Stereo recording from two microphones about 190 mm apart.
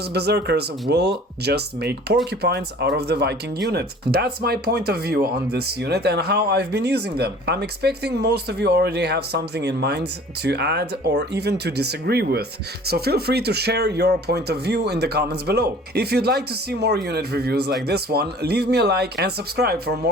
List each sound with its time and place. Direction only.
0.1 s speech: 60° right (ahead or behind)